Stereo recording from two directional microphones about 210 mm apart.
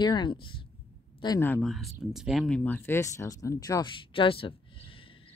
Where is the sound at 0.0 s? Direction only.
20° left (ahead or behind).